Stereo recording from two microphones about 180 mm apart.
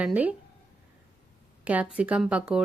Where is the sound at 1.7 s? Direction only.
5° right (ahead or behind).